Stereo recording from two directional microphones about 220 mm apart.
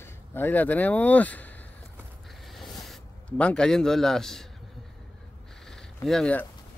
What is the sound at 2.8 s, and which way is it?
A man's voice, 5° left (ahead or behind).